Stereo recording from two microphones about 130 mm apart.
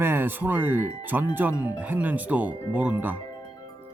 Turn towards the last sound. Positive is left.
turn(degrees=-15)  # may be behind; listen again after turning